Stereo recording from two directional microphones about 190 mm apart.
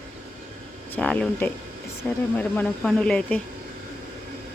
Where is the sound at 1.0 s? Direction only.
5° left (ahead or behind).